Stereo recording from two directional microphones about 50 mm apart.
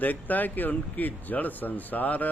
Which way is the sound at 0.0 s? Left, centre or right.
Left.